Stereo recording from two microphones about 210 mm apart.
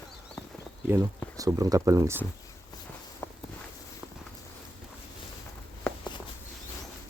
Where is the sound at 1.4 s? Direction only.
15° right (ahead or behind).